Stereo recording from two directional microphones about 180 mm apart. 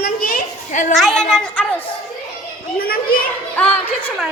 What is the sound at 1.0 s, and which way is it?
Speech, centre (ahead or behind).